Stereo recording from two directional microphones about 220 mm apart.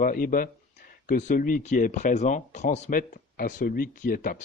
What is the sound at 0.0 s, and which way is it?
Speech, 40° left (ahead or behind).